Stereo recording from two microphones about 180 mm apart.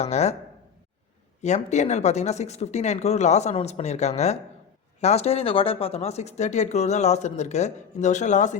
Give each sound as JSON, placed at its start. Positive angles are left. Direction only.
{"t": 0.0, "sound": "speech", "side_deg": 35}
{"t": 1.4, "sound": "speech", "side_deg": 40}